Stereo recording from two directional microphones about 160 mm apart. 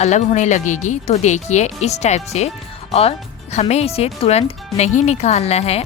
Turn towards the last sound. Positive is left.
turn(degrees=40)  # may be behind; listen again after turning